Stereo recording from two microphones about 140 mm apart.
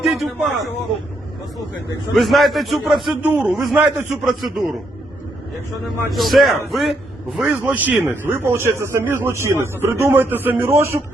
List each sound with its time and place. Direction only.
0.0 s a man's voice: centre (ahead or behind)
2.1 s a man's voice: centre (ahead or behind)
3.2 s a man's voice: 10° right (ahead or behind)
6.1 s a man's voice: centre (ahead or behind); by 11.0 s 20° right (ahead or behind)